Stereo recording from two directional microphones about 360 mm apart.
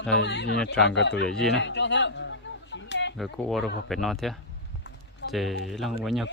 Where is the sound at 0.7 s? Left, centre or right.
Centre.